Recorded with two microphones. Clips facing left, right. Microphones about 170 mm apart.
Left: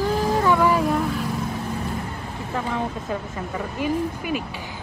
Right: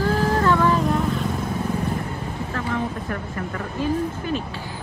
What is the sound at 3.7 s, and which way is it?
Speech, 15° left (ahead or behind).